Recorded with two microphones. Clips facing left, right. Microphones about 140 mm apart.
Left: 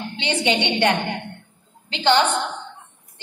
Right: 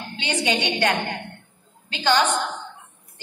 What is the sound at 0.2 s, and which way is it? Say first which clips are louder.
Speech: left 2 dB; 25° left (ahead or behind).